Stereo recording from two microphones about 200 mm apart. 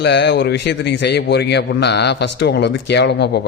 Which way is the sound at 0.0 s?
60° left (ahead or behind).